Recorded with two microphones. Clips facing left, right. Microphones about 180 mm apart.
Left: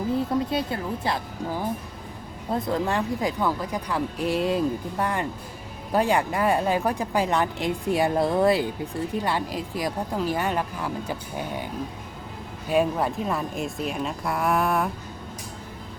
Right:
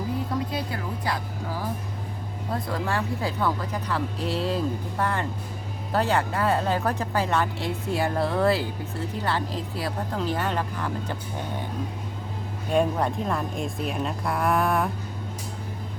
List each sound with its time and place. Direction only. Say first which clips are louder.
0.5 s speech: left 4 dB; 25° left (ahead or behind); by 11.6 s 10° left (ahead or behind)
12.6 s speech: left 1 dB; 5° left (ahead or behind)